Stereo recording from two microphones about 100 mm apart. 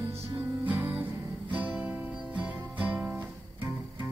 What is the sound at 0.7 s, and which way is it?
Music, 20° right (ahead or behind).